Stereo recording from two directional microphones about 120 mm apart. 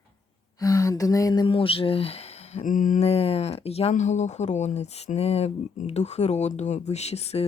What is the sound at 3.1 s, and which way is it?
Speech, 55° left (ahead or behind).